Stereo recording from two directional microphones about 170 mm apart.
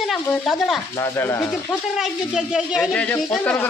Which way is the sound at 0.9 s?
15° left (ahead or behind).